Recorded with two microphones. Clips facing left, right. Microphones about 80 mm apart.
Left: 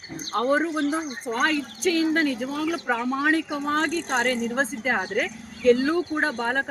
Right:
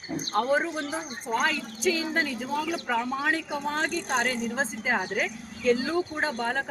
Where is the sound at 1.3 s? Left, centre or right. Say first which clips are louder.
Left 2 dB; left.